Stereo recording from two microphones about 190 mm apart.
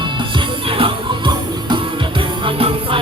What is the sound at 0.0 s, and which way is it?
Music, 25° right (ahead or behind).